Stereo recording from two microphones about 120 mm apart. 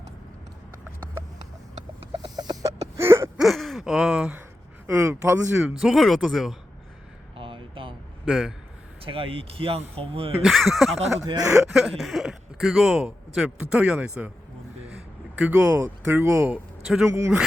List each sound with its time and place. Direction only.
2.2 s a sound: 35° right (ahead or behind)
3.0 s a sound: 20° right (ahead or behind)
3.3 s gasp: centre (ahead or behind)
4.9 s a sound: 25° right (ahead or behind)
5.8 s speech: centre (ahead or behind)
7.3 s a sound: 45° right (ahead or behind)
8.2 s speech: 5° right (ahead or behind)
9.0 s speech: 50° right (ahead or behind)
10.4 s speech: centre (ahead or behind)
11.3 s speech: 30° right (ahead or behind)
11.5 s speech: 5° right (ahead or behind)
15.4 s speech: 10° right (ahead or behind)
16.8 s speech: 5° right (ahead or behind)
17.1 s speech: 25° right (ahead or behind)